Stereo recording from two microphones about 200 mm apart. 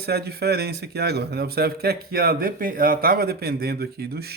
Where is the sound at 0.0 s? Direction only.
55° right (ahead or behind).